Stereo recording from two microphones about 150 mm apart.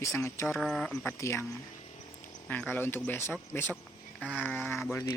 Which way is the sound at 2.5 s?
10° left (ahead or behind).